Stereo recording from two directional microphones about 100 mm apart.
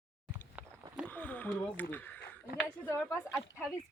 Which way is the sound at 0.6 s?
15° right (ahead or behind).